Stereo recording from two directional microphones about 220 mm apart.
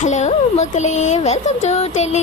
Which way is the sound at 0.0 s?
30° left (ahead or behind).